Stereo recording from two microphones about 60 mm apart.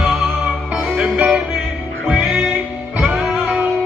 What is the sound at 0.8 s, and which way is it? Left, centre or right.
Music, centre.